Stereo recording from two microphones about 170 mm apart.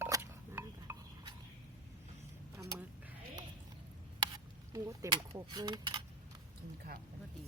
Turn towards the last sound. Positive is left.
turn(degrees=-25)  # may be behind; listen again after turning